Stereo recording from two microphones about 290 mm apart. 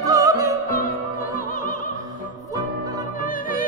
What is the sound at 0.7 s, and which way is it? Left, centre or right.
Opera, left.